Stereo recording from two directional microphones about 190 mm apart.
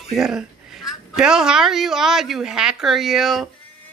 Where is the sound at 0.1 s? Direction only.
5° right (ahead or behind).